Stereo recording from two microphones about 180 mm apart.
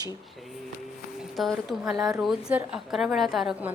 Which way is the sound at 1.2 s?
Centre (ahead or behind).